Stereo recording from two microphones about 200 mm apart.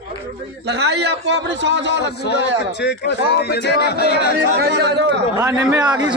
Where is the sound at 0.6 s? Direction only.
60° right (ahead or behind).